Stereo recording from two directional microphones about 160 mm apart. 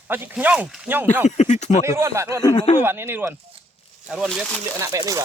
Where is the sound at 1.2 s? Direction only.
45° left (ahead or behind).